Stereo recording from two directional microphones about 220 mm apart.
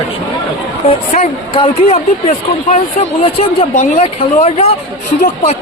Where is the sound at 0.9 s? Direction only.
30° left (ahead or behind).